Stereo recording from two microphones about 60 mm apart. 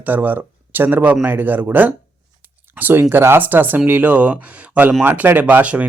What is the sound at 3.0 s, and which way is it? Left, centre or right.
Speech, right.